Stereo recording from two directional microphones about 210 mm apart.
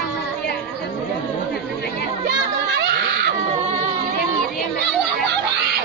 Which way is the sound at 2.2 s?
55° right (ahead or behind).